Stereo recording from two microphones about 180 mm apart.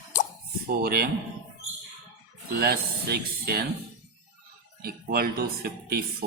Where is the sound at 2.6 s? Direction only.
60° right (ahead or behind).